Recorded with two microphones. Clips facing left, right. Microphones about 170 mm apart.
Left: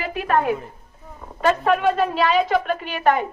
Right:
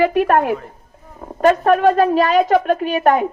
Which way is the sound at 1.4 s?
45° right (ahead or behind).